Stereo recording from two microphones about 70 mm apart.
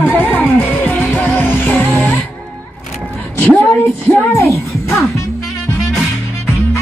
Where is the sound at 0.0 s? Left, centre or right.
Left.